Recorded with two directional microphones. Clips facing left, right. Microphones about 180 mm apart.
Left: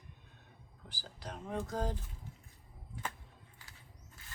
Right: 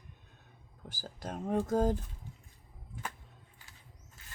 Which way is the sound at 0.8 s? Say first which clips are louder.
Right 5 dB; 45° right (ahead or behind).